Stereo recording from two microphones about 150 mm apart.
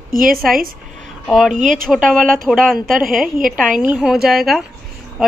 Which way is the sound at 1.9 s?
Centre (ahead or behind).